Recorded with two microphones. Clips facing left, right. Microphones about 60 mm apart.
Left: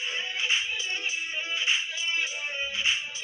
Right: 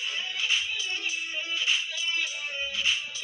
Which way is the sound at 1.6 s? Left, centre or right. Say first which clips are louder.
Even; left.